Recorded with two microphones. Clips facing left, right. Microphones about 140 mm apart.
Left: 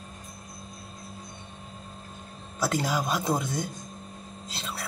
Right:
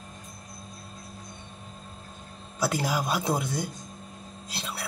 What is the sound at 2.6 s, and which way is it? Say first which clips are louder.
A man's voice: even; 5° right (ahead or behind).